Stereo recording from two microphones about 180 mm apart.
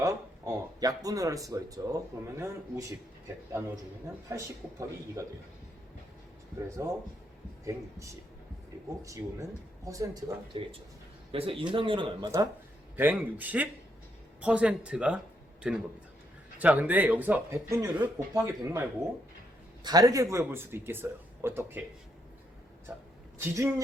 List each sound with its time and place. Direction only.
0.0 s speech: 20° right (ahead or behind)
4.3 s speech: 15° right (ahead or behind)
6.8 s speech: 15° right (ahead or behind)
11.3 s speech: 30° right (ahead or behind)
13.0 s a man's voice: 10° right (ahead or behind)
23.4 s speech: 15° right (ahead or behind)